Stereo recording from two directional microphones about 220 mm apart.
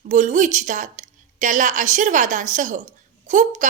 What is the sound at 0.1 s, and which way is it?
A woman's voice, 35° right (ahead or behind).